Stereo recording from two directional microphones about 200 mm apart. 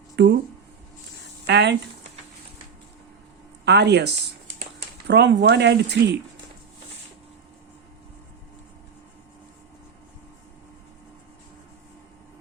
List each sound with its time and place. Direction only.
0.2 s speech: 60° right (ahead or behind)
1.5 s speech: 60° right (ahead or behind)
3.7 s speech: 55° right (ahead or behind)